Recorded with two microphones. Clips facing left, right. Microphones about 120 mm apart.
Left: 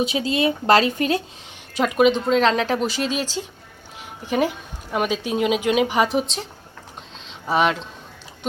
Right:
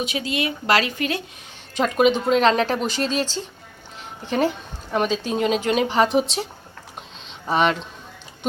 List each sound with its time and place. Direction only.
0.1 s speech: 30° left (ahead or behind)
1.7 s a woman's voice: 5° left (ahead or behind)
6.1 s a woman's voice: 5° right (ahead or behind)